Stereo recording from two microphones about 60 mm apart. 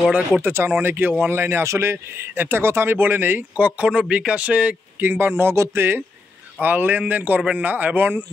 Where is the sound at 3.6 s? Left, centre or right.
Right.